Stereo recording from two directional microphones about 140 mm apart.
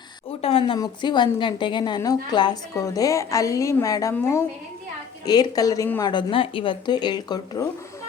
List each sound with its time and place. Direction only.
0.4 s a woman's voice: 35° left (ahead or behind)